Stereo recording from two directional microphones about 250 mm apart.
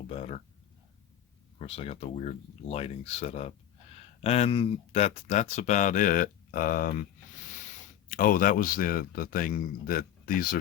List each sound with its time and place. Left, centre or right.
0.1 s a sound: left
1.5 s speech: left
8.1 s speech: left